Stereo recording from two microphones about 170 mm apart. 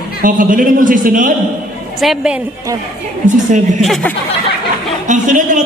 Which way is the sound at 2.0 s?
5° right (ahead or behind).